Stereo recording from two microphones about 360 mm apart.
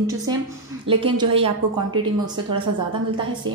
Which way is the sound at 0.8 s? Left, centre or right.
Centre.